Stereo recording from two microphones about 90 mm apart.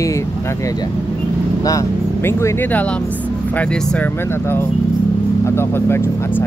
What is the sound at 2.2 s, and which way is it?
Speech, 30° left (ahead or behind).